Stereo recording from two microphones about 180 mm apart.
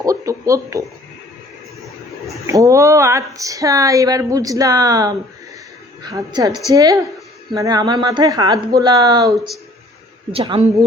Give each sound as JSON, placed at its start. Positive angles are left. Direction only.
{"t": 0.0, "sound": "speech", "side_deg": -20}
{"t": 2.5, "sound": "speech", "side_deg": -15}